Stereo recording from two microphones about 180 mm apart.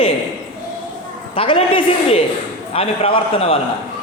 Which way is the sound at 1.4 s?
30° left (ahead or behind).